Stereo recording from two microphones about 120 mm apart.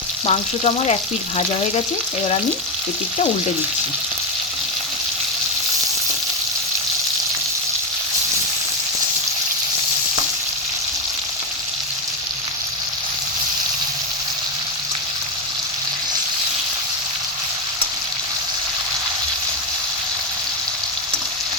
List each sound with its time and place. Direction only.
0.3 s frying: 60° left (ahead or behind)